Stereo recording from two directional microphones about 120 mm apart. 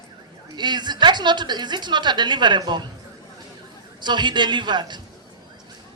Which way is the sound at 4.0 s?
40° right (ahead or behind).